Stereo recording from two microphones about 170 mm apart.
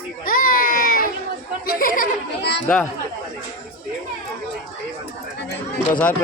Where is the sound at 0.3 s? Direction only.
55° left (ahead or behind).